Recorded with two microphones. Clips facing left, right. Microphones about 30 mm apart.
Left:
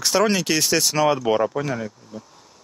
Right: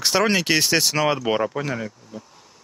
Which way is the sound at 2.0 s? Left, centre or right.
Centre.